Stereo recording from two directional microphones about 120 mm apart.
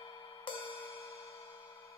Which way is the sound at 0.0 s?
45° left (ahead or behind).